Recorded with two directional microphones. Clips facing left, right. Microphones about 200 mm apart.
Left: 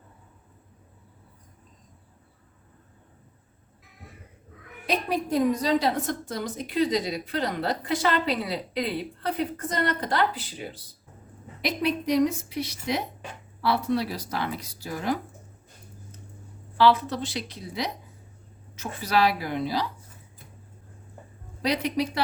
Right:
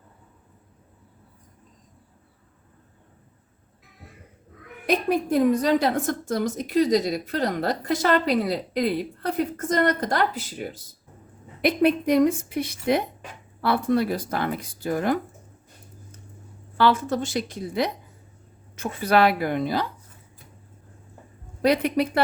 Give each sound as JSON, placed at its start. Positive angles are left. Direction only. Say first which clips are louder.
{"t": 4.9, "sound": "a woman's voice", "louder": "right 4 dB", "side_deg": -50}
{"t": 16.7, "sound": "a woman's voice", "louder": "even", "side_deg": -50}
{"t": 21.6, "sound": "a woman's voice", "louder": "right 5 dB", "side_deg": -55}